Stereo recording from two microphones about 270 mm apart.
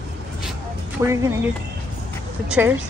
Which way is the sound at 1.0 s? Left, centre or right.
Centre.